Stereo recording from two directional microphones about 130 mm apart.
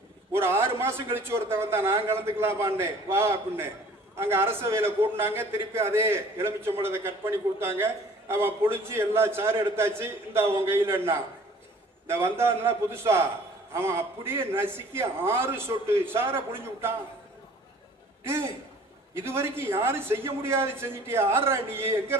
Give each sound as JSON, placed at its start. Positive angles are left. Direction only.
{"t": 0.3, "sound": "a man's voice", "side_deg": -20}
{"t": 18.2, "sound": "a sound", "side_deg": -20}
{"t": 19.1, "sound": "a man's voice", "side_deg": -20}